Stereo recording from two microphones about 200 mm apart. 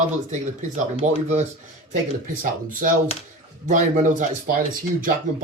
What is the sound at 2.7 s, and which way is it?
Speech, 45° right (ahead or behind).